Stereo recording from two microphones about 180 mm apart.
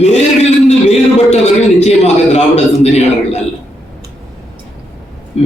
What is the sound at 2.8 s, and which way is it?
Speech, 35° left (ahead or behind).